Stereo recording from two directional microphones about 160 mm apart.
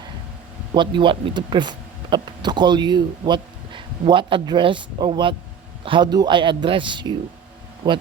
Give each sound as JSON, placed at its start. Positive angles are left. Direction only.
{"t": 0.7, "sound": "speech", "side_deg": -30}